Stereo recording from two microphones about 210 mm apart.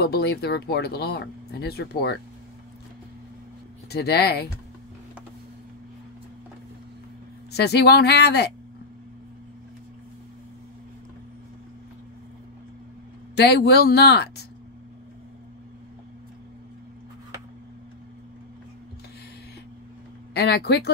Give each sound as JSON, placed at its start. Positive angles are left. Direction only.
{"t": 0.0, "sound": "speech", "side_deg": 50}
{"t": 3.9, "sound": "speech", "side_deg": 50}
{"t": 7.5, "sound": "speech", "side_deg": 50}
{"t": 13.4, "sound": "speech", "side_deg": 50}
{"t": 20.3, "sound": "speech", "side_deg": 50}